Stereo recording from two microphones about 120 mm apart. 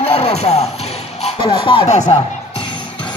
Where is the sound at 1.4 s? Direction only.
45° left (ahead or behind).